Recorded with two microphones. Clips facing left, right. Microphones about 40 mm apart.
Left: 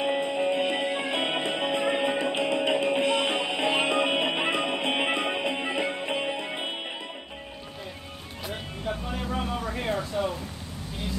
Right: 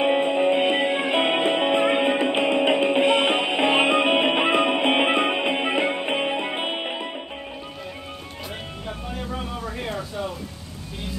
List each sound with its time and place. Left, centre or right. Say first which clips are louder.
0.0 s music: right 6 dB; right
8.8 s music: left 2 dB; centre
9.7 s a sound: left 1 dB; centre